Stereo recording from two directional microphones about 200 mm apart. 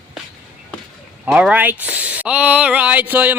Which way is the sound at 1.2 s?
5° right (ahead or behind).